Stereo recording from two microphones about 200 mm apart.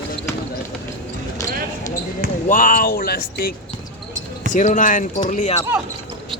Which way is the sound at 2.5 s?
40° left (ahead or behind).